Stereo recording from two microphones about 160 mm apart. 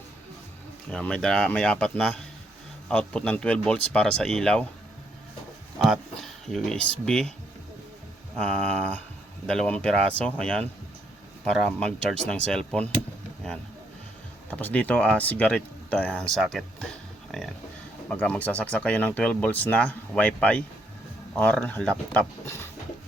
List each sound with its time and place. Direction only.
0.9 s speech: 5° left (ahead or behind)
6.5 s speech: 5° left (ahead or behind)
8.4 s speech: 5° left (ahead or behind)
14.5 s speech: 10° left (ahead or behind)
22.4 s a sound: 20° left (ahead or behind)